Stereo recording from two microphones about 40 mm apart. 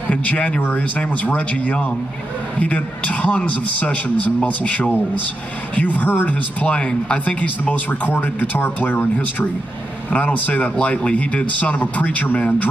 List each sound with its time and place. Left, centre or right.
0.7 s speech: left
5.8 s speech: left
6.6 s speech: left
7.2 s speech: left